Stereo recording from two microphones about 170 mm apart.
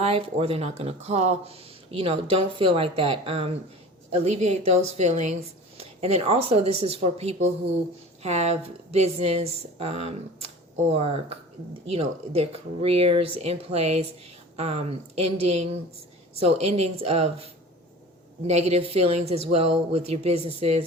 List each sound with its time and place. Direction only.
0.0 s speech: 35° right (ahead or behind)